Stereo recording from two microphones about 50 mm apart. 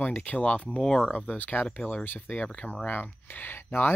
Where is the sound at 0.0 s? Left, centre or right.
Left.